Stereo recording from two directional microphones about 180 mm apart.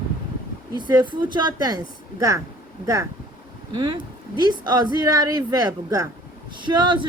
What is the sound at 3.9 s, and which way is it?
Speech, 25° right (ahead or behind).